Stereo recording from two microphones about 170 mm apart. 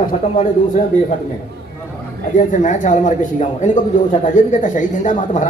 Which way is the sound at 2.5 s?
45° left (ahead or behind).